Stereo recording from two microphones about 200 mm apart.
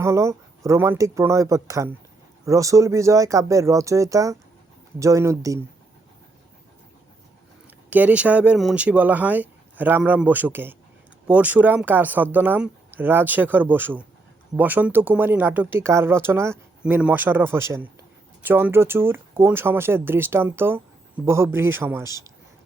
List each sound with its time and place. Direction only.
0.0 s speech: 15° right (ahead or behind)
7.9 s speech: 5° right (ahead or behind)